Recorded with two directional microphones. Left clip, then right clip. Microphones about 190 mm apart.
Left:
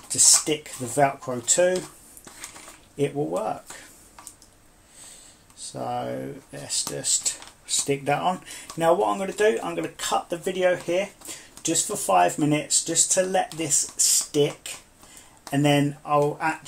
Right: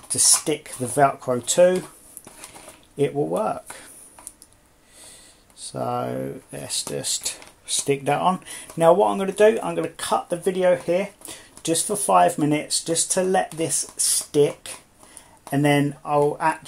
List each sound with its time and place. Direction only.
0.1 s speech: 40° right (ahead or behind)
3.0 s speech: 45° right (ahead or behind)
5.6 s speech: 45° right (ahead or behind)